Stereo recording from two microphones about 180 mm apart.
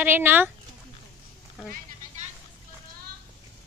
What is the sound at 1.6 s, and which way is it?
Speech, 5° right (ahead or behind).